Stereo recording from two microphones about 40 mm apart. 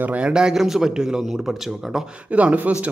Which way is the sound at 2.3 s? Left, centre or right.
Right.